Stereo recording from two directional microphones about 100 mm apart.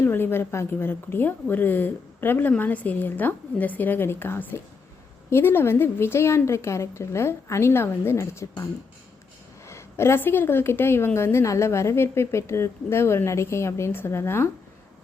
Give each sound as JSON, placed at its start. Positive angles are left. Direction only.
{"t": 0.0, "sound": "a woman's voice", "side_deg": 20}
{"t": 9.6, "sound": "a woman's voice", "side_deg": 25}